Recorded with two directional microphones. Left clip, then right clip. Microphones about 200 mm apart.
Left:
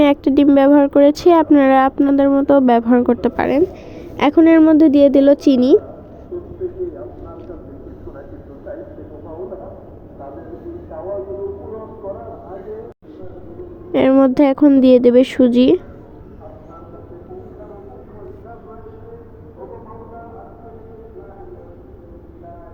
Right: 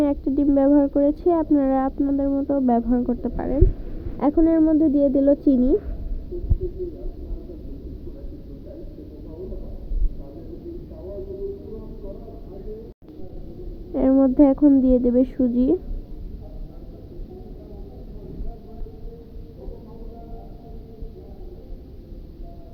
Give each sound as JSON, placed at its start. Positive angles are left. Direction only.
{"t": 0.0, "sound": "a woman's voice", "side_deg": 90}
{"t": 0.5, "sound": "speech", "side_deg": 80}
{"t": 1.2, "sound": "speech", "side_deg": 90}
{"t": 2.0, "sound": "speech", "side_deg": 70}
{"t": 13.9, "sound": "speech", "side_deg": 75}